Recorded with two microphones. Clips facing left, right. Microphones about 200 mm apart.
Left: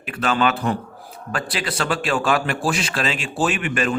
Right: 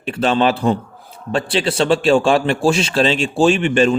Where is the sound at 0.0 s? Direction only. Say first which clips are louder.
Right 5 dB; 30° right (ahead or behind).